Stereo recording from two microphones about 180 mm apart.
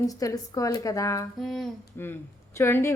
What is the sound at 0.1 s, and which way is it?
Speech, 20° left (ahead or behind).